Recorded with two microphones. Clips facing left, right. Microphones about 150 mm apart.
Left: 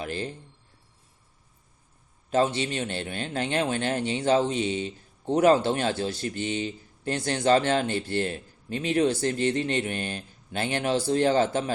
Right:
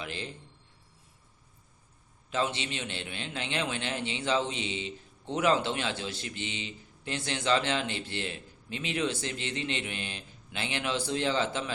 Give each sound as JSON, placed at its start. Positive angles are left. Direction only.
{"t": 0.0, "sound": "speech", "side_deg": 45}
{"t": 2.3, "sound": "speech", "side_deg": 45}